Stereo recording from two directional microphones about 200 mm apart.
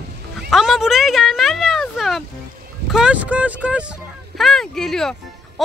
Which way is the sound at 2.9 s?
5° right (ahead or behind).